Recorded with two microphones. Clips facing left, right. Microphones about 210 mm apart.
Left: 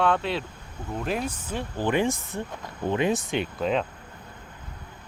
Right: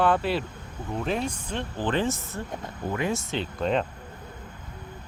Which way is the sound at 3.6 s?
Centre (ahead or behind).